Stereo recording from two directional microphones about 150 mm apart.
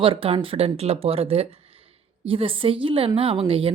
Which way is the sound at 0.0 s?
35° right (ahead or behind).